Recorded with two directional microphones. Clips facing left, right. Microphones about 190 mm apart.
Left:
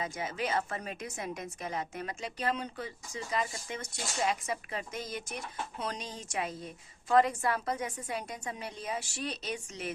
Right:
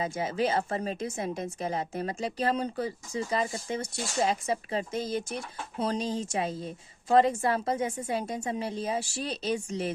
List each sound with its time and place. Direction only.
0.0 s a woman's voice: 30° right (ahead or behind)